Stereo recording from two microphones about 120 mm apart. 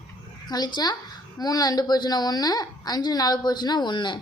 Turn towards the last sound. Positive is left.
turn(degrees=40)  # may be behind; listen again after turning